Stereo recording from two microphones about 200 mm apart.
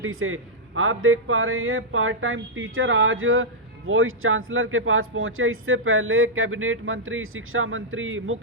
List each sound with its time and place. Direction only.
0.0 s a man's voice: 90° right